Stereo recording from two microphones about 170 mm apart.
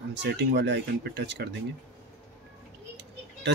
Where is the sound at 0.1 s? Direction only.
90° right.